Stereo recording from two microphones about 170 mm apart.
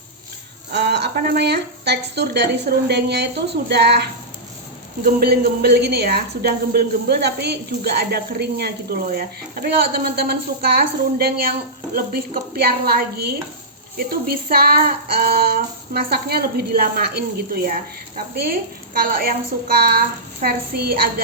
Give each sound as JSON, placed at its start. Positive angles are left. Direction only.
{"t": 0.7, "sound": "a woman's voice", "side_deg": -80}
{"t": 5.0, "sound": "a woman's voice", "side_deg": -65}
{"t": 11.9, "sound": "female singing", "side_deg": -60}
{"t": 18.9, "sound": "female singing", "side_deg": -60}